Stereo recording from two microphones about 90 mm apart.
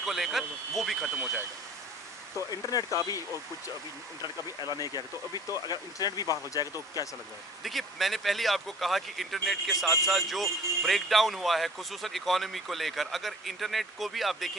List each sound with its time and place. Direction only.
0.0 s speech: centre (ahead or behind)
2.5 s speech: 40° left (ahead or behind)
4.2 s speech: 45° left (ahead or behind)
7.6 s speech: centre (ahead or behind)